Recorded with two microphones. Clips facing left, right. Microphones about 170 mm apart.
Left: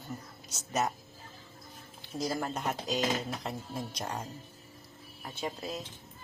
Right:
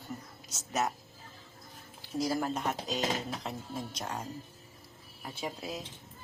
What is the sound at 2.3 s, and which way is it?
Speech, 5° right (ahead or behind).